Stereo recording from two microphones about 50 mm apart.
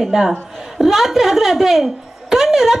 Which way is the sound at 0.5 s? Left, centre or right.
Centre.